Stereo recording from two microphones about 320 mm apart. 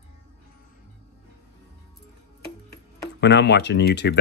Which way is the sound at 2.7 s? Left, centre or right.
Left.